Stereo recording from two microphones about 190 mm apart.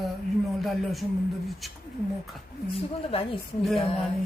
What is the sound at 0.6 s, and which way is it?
Speech, centre (ahead or behind).